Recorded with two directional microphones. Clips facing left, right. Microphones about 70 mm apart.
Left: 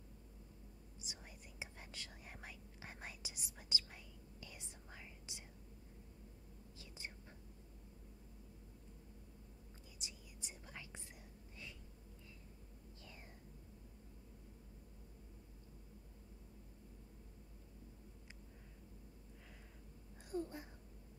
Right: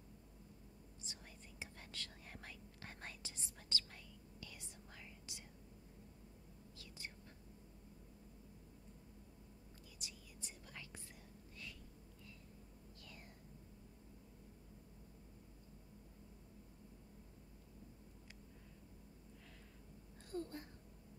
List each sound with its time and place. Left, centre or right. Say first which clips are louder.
1.0 s whispering: left 1 dB; centre
9.9 s whispering: left 1 dB; left
20.2 s a sound: left 2 dB; centre